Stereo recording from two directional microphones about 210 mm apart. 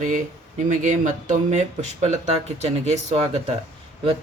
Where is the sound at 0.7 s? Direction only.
35° right (ahead or behind).